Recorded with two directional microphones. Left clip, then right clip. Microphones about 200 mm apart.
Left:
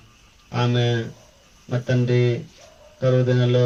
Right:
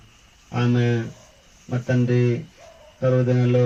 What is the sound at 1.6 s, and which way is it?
A man's voice, 40° right (ahead or behind).